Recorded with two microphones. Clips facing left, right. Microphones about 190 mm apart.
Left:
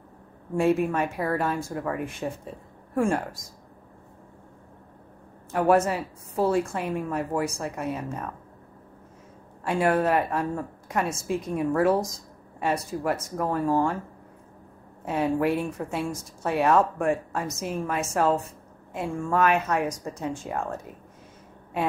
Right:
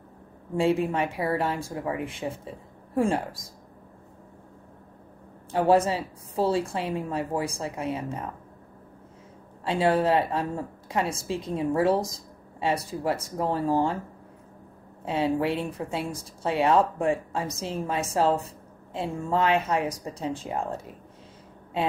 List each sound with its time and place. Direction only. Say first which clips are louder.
0.6 s speech: left 1 dB; 25° right (ahead or behind)
2.2 s speech: left 1 dB; 15° right (ahead or behind)
5.5 s a woman's voice: even; 30° right (ahead or behind)
6.9 s speech: left 1 dB; 20° right (ahead or behind)
9.7 s speech: even; 30° right (ahead or behind)
15.0 s speech: left 1 dB; 25° right (ahead or behind)